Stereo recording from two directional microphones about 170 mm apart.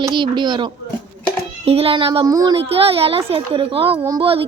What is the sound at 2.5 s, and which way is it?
A woman's voice, 35° right (ahead or behind).